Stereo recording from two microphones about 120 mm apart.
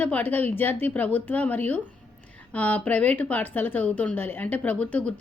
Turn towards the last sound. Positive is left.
turn(degrees=10)  # may be behind; listen again after turning